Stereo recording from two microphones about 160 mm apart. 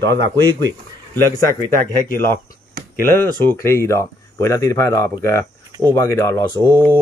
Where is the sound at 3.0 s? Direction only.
15° left (ahead or behind).